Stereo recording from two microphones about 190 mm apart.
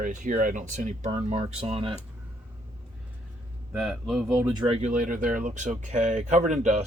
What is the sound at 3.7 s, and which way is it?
Speech, 5° right (ahead or behind).